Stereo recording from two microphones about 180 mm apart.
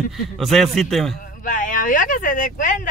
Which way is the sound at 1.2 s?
45° left (ahead or behind).